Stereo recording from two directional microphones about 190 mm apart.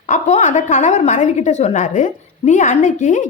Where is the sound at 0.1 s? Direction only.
40° left (ahead or behind).